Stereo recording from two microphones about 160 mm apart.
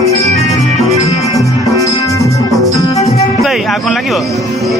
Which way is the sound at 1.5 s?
20° left (ahead or behind).